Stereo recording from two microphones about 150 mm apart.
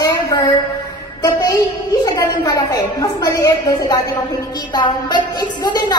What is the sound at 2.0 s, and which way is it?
A woman's voice, 25° left (ahead or behind).